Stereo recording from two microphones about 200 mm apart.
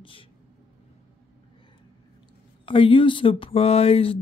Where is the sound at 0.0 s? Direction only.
25° left (ahead or behind).